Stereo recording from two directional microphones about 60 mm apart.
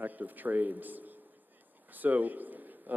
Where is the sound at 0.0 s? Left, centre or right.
Right.